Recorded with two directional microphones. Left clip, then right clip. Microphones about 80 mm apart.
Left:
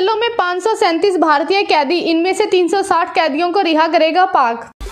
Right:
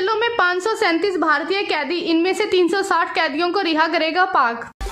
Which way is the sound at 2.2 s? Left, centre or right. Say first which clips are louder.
Left 1 dB; left.